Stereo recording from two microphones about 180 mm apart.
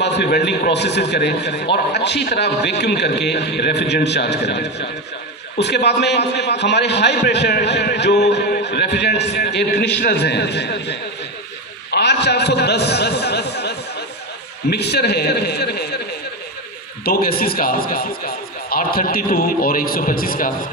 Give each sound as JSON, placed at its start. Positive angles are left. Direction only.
{"t": 0.0, "sound": "a man's voice", "side_deg": 70}
{"t": 11.9, "sound": "a sound", "side_deg": 70}
{"t": 14.7, "sound": "a man's voice", "side_deg": 65}
{"t": 17.0, "sound": "a man's voice", "side_deg": 55}